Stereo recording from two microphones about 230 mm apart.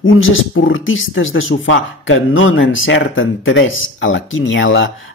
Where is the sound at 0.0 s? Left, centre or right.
Left.